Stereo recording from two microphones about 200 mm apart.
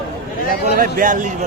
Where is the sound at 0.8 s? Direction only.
45° right (ahead or behind).